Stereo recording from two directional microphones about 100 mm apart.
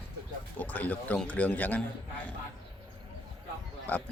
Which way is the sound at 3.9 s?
20° left (ahead or behind).